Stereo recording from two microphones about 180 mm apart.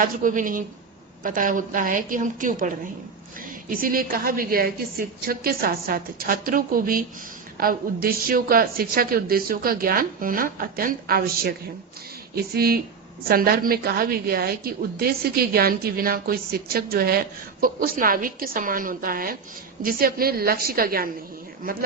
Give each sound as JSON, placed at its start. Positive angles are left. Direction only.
{"t": 0.0, "sound": "a woman's voice", "side_deg": -45}